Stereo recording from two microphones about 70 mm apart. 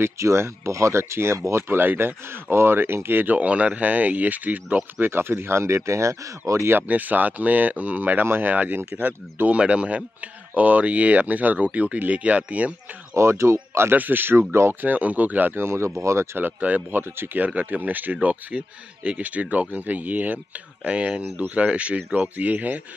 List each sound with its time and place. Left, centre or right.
0.0 s speech: right; by 5.0 s centre
5.0 s speech: right
6.9 s speech: right
13.1 s speech: right
13.9 s speech: right
16.3 s speech: right